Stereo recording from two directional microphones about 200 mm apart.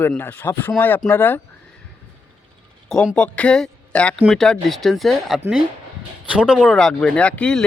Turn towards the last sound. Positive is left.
turn(degrees=5)  # may be behind; listen again after turning